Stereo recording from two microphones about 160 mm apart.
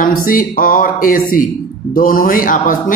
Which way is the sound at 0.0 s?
65° left (ahead or behind).